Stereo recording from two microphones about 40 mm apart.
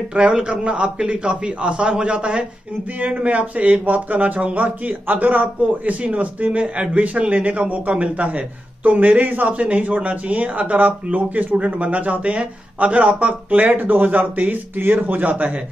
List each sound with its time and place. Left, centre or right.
0.1 s a man's voice: right